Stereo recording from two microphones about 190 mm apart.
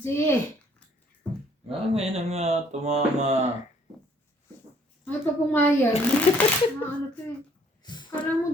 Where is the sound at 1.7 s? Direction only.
30° right (ahead or behind).